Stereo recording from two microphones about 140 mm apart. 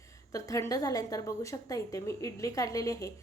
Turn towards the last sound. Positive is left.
turn(degrees=25)  # may be behind; listen again after turning